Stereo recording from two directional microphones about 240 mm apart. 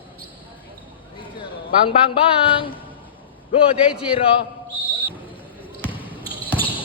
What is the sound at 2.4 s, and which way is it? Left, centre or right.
Speech, left.